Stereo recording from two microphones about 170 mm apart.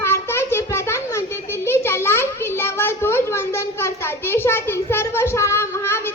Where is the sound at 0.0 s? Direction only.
15° left (ahead or behind).